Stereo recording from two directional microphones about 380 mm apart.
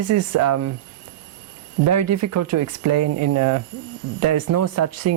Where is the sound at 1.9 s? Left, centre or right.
Right.